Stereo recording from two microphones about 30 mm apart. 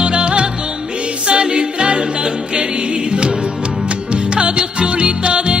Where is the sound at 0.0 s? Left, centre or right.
Right.